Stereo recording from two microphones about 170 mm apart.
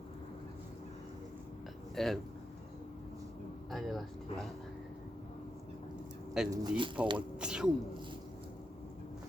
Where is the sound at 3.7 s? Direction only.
Centre (ahead or behind).